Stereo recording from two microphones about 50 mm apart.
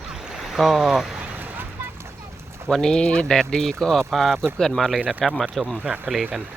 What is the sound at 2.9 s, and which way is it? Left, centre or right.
Speech, centre.